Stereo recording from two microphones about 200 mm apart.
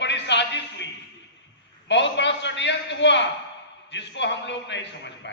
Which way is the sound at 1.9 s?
60° left (ahead or behind).